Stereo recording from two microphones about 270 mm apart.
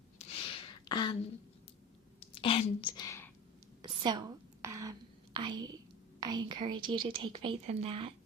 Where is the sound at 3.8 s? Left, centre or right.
Centre.